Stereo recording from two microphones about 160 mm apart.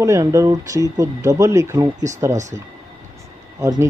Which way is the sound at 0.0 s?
20° right (ahead or behind).